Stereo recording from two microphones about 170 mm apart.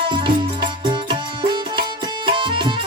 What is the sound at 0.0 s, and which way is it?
Music, 30° right (ahead or behind).